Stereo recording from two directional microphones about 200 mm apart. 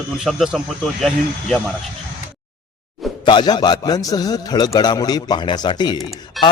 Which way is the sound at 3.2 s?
25° left (ahead or behind).